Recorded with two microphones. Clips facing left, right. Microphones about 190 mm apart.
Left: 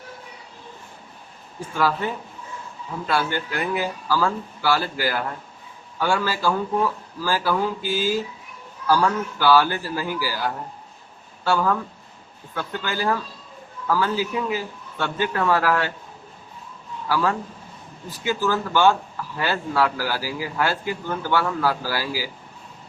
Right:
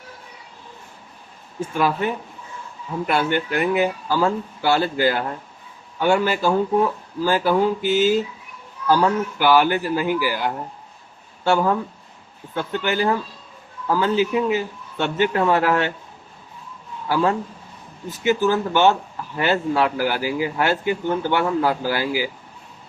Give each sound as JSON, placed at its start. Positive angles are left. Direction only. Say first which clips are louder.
{"t": 1.7, "sound": "speech", "louder": "right 2 dB", "side_deg": -20}
{"t": 17.1, "sound": "speech", "louder": "right 3 dB", "side_deg": -25}